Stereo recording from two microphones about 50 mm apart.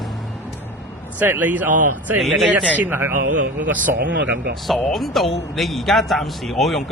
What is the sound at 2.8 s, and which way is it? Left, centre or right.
Speech, right.